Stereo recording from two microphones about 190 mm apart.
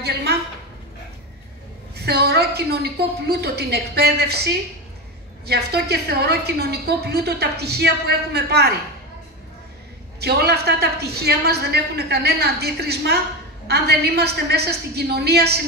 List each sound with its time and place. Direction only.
0.0 s a sound: 60° right (ahead or behind)
2.0 s a woman's voice: 60° right (ahead or behind)
5.5 s a woman's voice: 60° right (ahead or behind)
10.2 s a woman's voice: 60° right (ahead or behind)